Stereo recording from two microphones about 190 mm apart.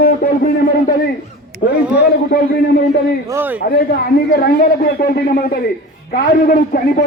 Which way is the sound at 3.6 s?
55° left (ahead or behind).